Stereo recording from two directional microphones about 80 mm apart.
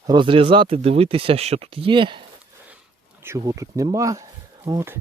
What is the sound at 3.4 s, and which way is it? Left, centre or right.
Speech, right.